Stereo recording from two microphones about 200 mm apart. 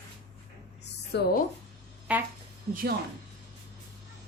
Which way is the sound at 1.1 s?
55° left (ahead or behind).